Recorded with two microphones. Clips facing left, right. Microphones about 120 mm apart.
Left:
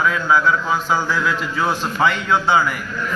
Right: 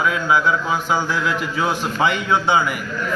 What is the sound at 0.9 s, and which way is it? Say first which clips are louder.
A man's voice: even; 20° right (ahead or behind).